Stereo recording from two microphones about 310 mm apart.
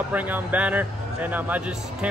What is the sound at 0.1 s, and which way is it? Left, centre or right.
Speech, centre.